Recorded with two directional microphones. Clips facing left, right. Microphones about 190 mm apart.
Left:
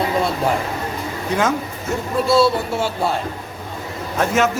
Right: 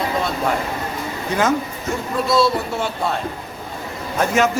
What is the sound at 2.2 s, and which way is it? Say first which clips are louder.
Speech: left 2 dB; 30° left (ahead or behind).